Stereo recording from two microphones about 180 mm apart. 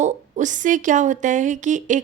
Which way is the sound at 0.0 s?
45° right (ahead or behind).